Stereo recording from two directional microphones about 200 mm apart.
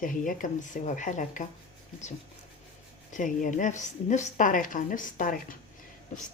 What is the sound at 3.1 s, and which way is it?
Speech, 40° left (ahead or behind).